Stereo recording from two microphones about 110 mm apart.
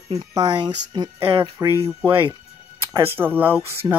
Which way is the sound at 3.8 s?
30° right (ahead or behind).